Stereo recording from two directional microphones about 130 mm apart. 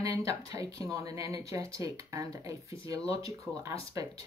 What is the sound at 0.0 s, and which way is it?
Speech, 25° right (ahead or behind).